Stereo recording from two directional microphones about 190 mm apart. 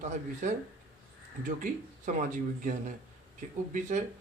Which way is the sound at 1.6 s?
45° right (ahead or behind).